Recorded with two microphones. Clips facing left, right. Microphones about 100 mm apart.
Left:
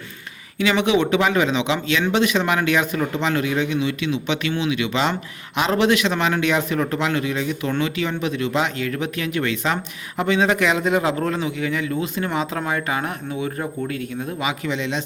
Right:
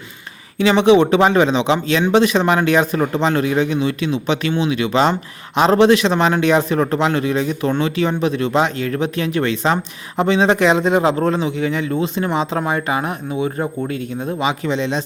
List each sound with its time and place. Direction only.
0.6 s a man's voice: 30° right (ahead or behind)